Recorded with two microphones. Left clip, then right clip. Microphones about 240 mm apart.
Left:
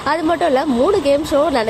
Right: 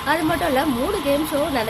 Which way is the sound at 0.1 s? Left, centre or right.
Centre.